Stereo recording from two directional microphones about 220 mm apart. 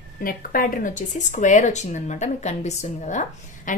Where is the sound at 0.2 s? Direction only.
40° left (ahead or behind).